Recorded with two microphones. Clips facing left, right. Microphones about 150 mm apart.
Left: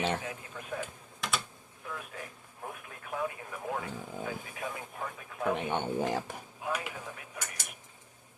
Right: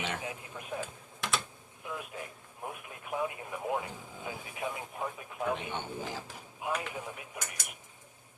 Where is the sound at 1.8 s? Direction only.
20° right (ahead or behind).